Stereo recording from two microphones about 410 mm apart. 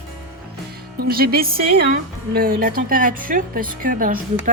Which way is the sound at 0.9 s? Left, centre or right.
Right.